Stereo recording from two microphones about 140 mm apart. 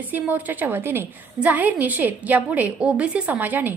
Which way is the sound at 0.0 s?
10° right (ahead or behind).